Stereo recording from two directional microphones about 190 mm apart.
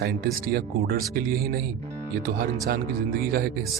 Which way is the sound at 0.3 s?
50° right (ahead or behind).